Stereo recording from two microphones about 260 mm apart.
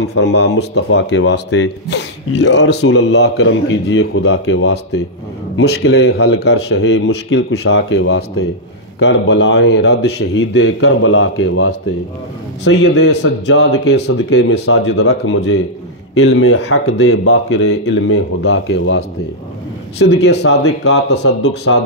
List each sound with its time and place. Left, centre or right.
0.0 s speech: left